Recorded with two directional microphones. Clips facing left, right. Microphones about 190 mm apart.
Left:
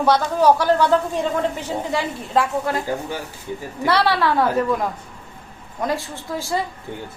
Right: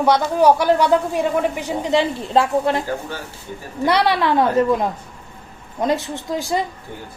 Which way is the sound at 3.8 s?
15° right (ahead or behind).